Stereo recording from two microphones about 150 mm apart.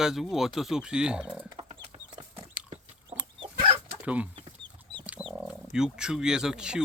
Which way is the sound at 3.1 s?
15° right (ahead or behind).